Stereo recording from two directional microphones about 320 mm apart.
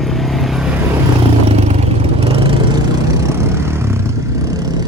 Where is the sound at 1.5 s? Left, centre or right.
Centre.